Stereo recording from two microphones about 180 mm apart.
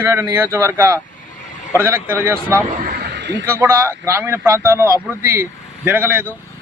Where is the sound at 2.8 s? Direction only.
60° right (ahead or behind); by 3.4 s 75° right (ahead or behind).